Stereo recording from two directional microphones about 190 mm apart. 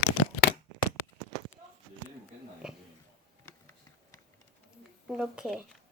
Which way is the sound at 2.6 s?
5° right (ahead or behind).